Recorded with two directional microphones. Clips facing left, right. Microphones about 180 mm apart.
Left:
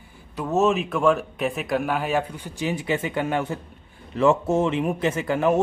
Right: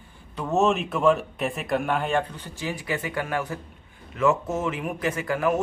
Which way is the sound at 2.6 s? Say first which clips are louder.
Left 5 dB; 20° left (ahead or behind).